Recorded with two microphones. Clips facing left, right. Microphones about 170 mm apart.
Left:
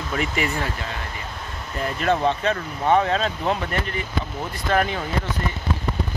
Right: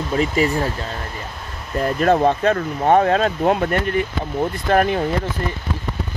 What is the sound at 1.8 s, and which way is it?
Speech, 45° right (ahead or behind).